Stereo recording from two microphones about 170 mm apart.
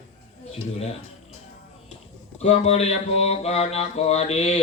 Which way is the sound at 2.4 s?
35° left (ahead or behind).